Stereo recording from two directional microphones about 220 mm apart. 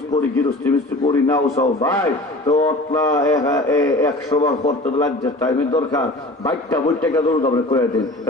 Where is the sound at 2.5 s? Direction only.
30° left (ahead or behind).